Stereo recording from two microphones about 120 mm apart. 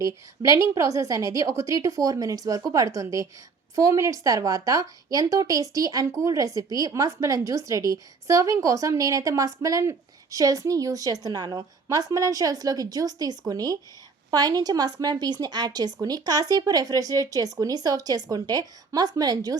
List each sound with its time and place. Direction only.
0.0 s a woman's voice: 25° right (ahead or behind)